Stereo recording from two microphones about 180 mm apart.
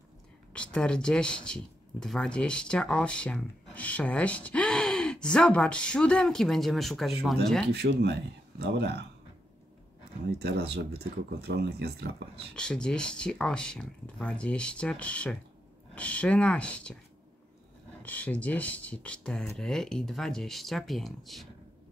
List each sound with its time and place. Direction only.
0.5 s speech: 5° left (ahead or behind)
7.6 s speech: 70° right (ahead or behind)
10.4 s speech: 65° right (ahead or behind)
12.5 s speech: 5° left (ahead or behind)
18.0 s speech: 10° left (ahead or behind)